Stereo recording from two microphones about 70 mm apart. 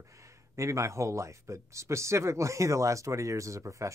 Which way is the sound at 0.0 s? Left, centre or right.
Right.